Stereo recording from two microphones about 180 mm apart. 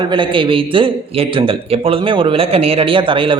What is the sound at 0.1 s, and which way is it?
A man's voice, 30° right (ahead or behind).